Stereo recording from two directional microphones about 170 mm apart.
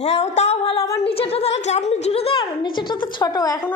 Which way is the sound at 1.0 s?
35° left (ahead or behind).